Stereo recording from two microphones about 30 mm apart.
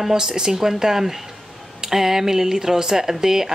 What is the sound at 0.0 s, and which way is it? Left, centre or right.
Speech, centre.